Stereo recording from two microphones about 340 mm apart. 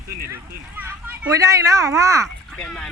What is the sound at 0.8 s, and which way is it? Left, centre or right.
Speech, centre.